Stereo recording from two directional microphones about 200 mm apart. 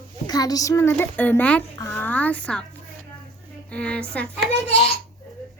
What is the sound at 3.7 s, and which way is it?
Speech, 5° left (ahead or behind).